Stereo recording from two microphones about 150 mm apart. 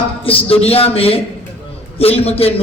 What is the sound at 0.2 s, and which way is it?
A man's voice, 40° left (ahead or behind).